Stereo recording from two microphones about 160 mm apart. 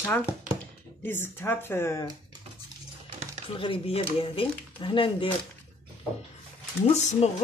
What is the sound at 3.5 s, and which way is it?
Speech, 35° left (ahead or behind).